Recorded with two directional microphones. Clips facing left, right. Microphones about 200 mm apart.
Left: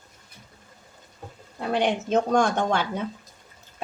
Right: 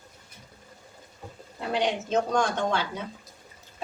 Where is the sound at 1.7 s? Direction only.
55° left (ahead or behind).